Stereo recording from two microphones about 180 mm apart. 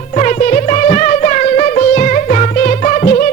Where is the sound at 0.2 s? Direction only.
40° left (ahead or behind).